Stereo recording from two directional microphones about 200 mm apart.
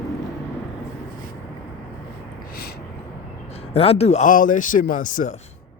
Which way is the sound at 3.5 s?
30° left (ahead or behind).